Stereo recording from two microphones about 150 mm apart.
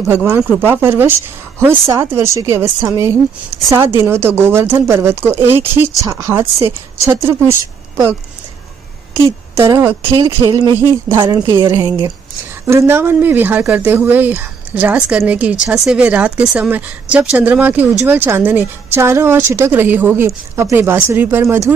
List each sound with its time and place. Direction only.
0.1 s speech: 15° right (ahead or behind)
9.1 s speech: 15° right (ahead or behind)
10.1 s speech: 30° right (ahead or behind)
12.6 s speech: 15° right (ahead or behind)